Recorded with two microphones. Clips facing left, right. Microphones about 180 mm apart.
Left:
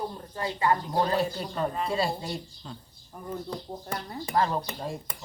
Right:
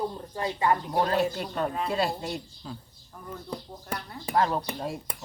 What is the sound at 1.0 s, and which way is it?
Speech, centre (ahead or behind).